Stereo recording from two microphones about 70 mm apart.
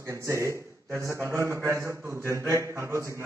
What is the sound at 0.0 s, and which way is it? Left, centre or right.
A man's voice, right.